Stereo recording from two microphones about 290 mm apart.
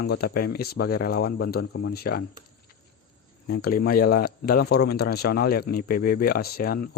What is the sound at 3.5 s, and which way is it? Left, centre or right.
Speech, left.